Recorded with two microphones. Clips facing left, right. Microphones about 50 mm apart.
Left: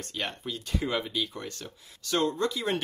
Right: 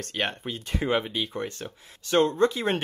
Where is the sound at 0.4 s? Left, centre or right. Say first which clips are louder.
Right 2 dB; right.